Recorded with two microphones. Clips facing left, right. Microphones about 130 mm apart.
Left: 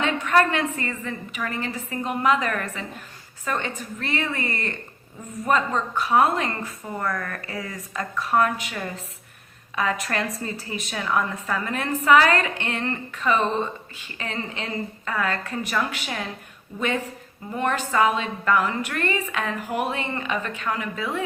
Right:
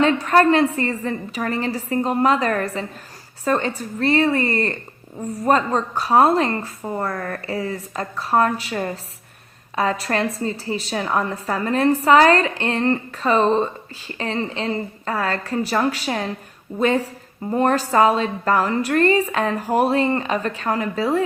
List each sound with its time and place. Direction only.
0.0 s a woman's voice: 35° right (ahead or behind)